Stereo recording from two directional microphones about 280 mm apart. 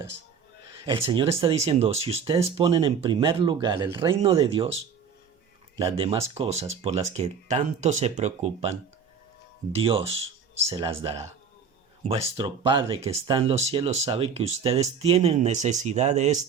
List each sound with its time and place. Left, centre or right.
0.9 s speech: centre